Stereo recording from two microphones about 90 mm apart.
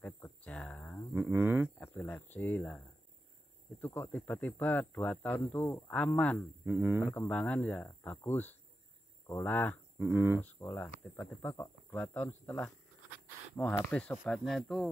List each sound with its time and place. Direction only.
0.0 s a sound: 20° left (ahead or behind)
1.1 s speech: 25° right (ahead or behind)
1.8 s speech: 25° left (ahead or behind)
3.8 s speech: 20° left (ahead or behind)
6.6 s speech: 20° right (ahead or behind)
7.0 s speech: 25° left (ahead or behind)
7.3 s speech: 15° left (ahead or behind)
9.9 s speech: 30° right (ahead or behind)
10.6 s speech: 25° left (ahead or behind)
12.0 s speech: 20° left (ahead or behind)
14.3 s speech: 5° left (ahead or behind)